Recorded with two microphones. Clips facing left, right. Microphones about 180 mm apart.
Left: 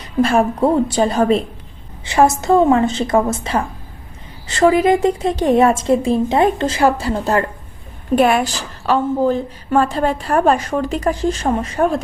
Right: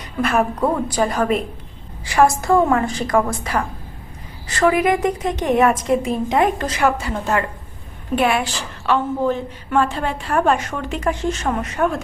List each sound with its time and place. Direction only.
0.0 s a woman's voice: 30° left (ahead or behind)